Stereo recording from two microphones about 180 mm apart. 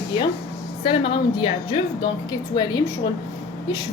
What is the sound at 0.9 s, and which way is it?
A woman's voice, 30° left (ahead or behind).